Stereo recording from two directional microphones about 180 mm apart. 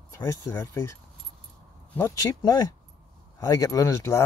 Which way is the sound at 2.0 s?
15° left (ahead or behind).